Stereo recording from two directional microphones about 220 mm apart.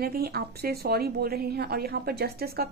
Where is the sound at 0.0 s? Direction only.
45° right (ahead or behind).